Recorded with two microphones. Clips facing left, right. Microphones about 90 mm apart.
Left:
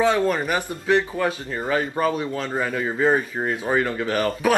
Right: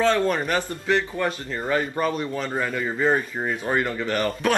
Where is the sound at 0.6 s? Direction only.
15° left (ahead or behind).